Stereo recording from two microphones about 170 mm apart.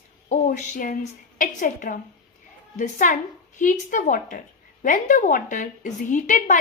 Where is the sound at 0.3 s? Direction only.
50° left (ahead or behind).